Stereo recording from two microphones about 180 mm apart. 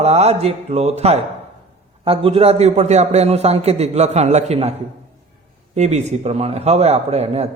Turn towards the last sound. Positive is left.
turn(degrees=-35)  # may be behind; listen again after turning